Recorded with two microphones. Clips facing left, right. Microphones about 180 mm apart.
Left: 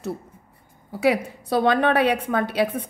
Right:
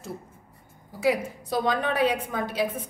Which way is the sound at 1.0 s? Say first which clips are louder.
Left 4 dB; 65° left (ahead or behind).